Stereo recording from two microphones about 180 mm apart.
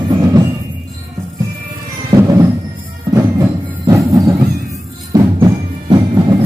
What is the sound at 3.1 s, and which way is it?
Music, 20° right (ahead or behind).